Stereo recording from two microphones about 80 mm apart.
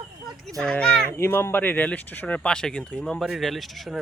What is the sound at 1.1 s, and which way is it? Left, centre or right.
Speech, left.